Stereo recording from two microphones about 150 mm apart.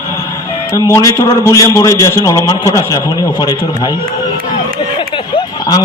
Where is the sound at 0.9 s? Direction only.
20° left (ahead or behind).